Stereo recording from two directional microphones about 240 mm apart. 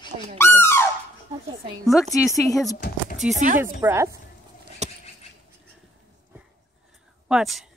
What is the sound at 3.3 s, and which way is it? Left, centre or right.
Speech, right.